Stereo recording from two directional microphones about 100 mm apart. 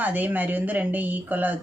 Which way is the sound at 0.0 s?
15° right (ahead or behind).